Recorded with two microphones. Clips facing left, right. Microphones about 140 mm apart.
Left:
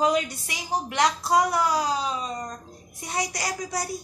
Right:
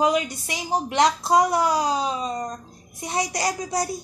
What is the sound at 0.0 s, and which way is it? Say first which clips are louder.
A child's voice: right 2 dB; 20° right (ahead or behind).